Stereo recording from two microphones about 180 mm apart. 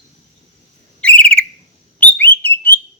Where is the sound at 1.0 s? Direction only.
5° left (ahead or behind).